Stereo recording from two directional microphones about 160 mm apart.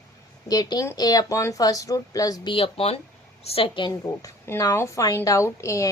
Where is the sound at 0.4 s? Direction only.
25° left (ahead or behind).